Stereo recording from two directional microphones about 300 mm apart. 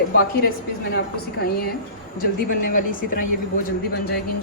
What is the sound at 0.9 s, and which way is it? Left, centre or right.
Speech, left.